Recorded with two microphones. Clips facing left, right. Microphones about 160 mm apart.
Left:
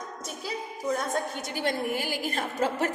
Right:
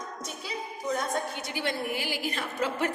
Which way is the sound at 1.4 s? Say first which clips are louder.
Left 2 dB; 45° left (ahead or behind).